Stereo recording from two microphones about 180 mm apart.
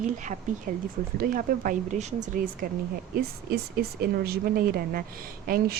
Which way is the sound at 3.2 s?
60° right (ahead or behind).